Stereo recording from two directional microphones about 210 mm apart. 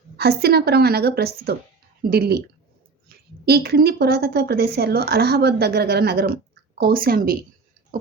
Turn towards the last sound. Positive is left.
turn(degrees=-45)  # may be behind; listen again after turning